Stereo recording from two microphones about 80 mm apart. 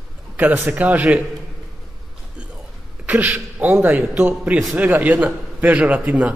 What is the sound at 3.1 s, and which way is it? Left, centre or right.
A man's voice, centre.